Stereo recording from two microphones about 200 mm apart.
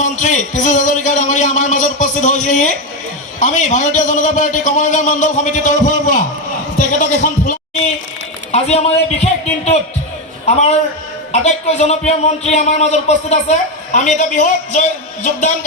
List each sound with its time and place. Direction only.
0.0 s a man's voice: 35° left (ahead or behind)
10.4 s a man's voice: 35° left (ahead or behind)